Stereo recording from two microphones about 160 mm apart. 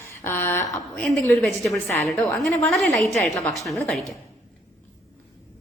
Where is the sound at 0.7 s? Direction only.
Centre (ahead or behind).